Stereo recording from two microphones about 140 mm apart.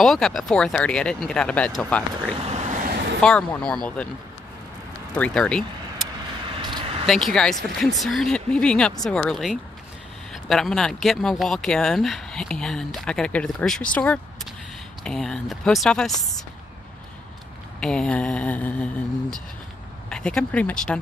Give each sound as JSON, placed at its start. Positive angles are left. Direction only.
{"t": 0.0, "sound": "speech", "side_deg": 0}
{"t": 2.3, "sound": "vehicle", "side_deg": -50}
{"t": 3.2, "sound": "speech", "side_deg": 5}
{"t": 5.1, "sound": "speech", "side_deg": 5}
{"t": 6.4, "sound": "vehicle", "side_deg": -35}
{"t": 7.1, "sound": "speech", "side_deg": 0}
{"t": 17.7, "sound": "speech", "side_deg": 5}
{"t": 20.1, "sound": "speech", "side_deg": 5}